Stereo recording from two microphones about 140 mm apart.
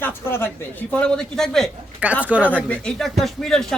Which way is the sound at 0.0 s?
15° left (ahead or behind).